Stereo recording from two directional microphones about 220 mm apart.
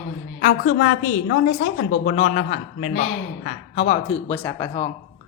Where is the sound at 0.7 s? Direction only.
40° left (ahead or behind).